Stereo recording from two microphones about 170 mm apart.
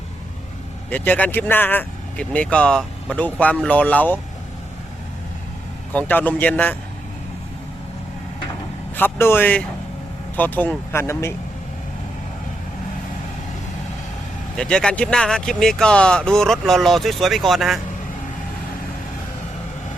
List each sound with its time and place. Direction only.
0.9 s speech: 10° left (ahead or behind)
5.9 s speech: 10° left (ahead or behind)
9.0 s speech: 15° left (ahead or behind)
14.5 s speech: 5° left (ahead or behind)